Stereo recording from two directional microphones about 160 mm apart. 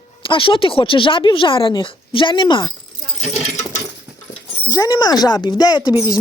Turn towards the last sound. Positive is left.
turn(degrees=25)  # may be behind; listen again after turning